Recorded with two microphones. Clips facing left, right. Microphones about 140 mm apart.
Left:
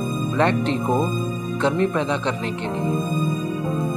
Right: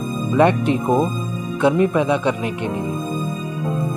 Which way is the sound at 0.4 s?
10° right (ahead or behind).